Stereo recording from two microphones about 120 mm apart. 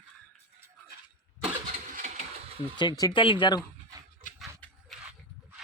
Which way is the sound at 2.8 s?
35° left (ahead or behind).